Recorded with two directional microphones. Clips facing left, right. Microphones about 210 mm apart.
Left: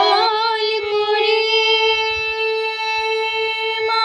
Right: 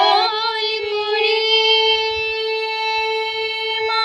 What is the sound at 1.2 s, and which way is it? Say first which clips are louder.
Music: left 1 dB; 50° left (ahead or behind).